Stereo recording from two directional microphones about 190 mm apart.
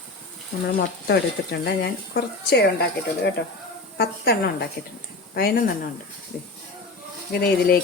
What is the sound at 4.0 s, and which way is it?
Speech, 55° left (ahead or behind).